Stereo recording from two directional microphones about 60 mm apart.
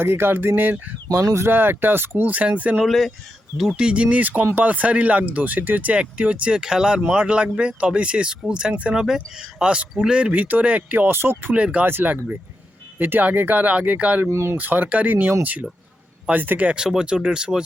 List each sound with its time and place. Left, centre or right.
0.0 s speech: right
2.7 s speech: centre
3.6 s speech: centre
9.0 s speech: centre
10.3 s speech: right
11.5 s speech: centre
11.9 s speech: right
14.3 s speech: right
14.5 s speech: right
16.6 s speech: centre